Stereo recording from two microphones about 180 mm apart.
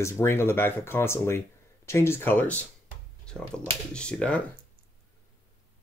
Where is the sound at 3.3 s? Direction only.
5° left (ahead or behind).